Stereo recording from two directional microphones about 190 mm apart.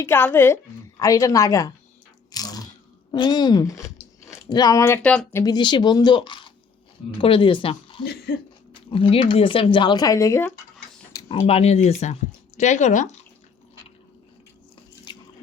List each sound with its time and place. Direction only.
0.0 s a woman's voice: 10° left (ahead or behind)
2.3 s a sound: 20° left (ahead or behind)
3.1 s speech: 20° left (ahead or behind)
5.4 s speech: 20° left (ahead or behind)
8.3 s speech: 55° left (ahead or behind)
8.7 s speech: 25° left (ahead or behind)
11.1 s a sound: 20° left (ahead or behind)
11.3 s speech: 30° left (ahead or behind)
15.1 s drip: 25° left (ahead or behind)